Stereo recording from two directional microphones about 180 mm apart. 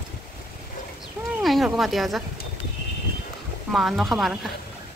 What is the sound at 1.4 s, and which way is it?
Speech, centre (ahead or behind).